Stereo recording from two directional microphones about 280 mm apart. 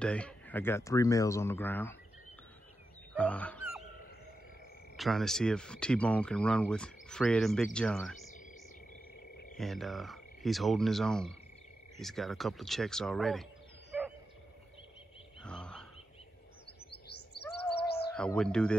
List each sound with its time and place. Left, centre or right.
0.0 s speech: centre
3.2 s fowl: centre
4.9 s speech: centre
9.6 s speech: centre
15.4 s a sound: centre
17.8 s bird: left
18.1 s speech: centre